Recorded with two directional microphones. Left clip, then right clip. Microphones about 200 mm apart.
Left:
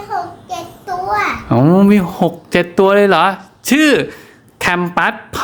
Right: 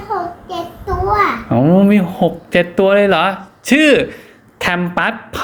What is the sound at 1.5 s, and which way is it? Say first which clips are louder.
Speech: left 1 dB; 35° left (ahead or behind).